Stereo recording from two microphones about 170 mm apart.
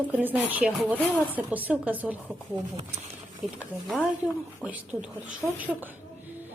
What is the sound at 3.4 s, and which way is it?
A woman's voice, centre (ahead or behind).